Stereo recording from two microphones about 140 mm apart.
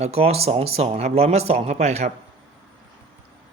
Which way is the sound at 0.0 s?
50° right (ahead or behind).